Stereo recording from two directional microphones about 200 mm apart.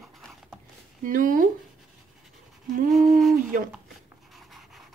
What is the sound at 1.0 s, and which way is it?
Speech, 40° right (ahead or behind).